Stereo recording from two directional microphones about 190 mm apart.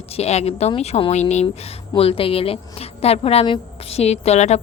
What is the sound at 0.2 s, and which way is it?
Speech, 35° left (ahead or behind).